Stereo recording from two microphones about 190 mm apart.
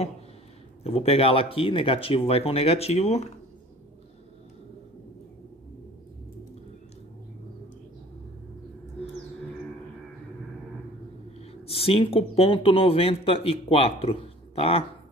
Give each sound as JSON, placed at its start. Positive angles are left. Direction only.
{"t": 0.8, "sound": "speech", "side_deg": 30}
{"t": 11.3, "sound": "speech", "side_deg": 30}